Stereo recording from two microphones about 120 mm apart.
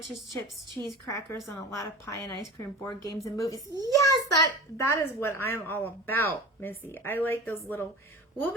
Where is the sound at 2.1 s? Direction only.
25° left (ahead or behind).